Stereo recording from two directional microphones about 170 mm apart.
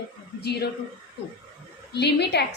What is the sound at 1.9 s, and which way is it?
Speech, 75° left (ahead or behind).